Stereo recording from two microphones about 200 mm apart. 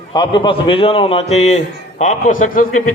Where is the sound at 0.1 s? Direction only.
25° left (ahead or behind).